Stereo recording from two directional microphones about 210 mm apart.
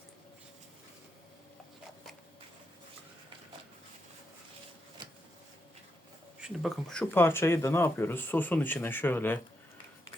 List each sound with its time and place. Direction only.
6.4 s speech: centre (ahead or behind)